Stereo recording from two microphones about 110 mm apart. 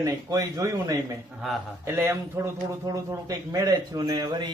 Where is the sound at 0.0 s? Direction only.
30° right (ahead or behind).